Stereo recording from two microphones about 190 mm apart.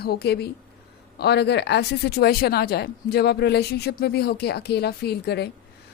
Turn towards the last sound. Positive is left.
turn(degrees=60)  # may be behind; listen again after turning